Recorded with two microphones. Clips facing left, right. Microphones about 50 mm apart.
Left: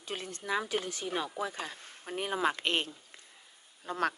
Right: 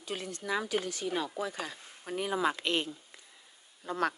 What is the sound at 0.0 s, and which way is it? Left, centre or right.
Speech, left.